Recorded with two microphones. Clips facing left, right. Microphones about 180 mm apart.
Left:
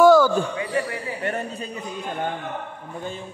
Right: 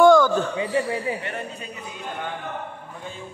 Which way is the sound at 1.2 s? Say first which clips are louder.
Left 5 dB; 45° left (ahead or behind).